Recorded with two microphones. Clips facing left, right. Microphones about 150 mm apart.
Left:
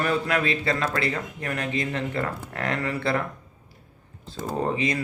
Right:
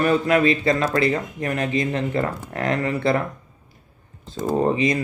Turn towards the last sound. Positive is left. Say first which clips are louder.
# right 5 dB
turn(degrees=-20)  # may be behind; listen again after turning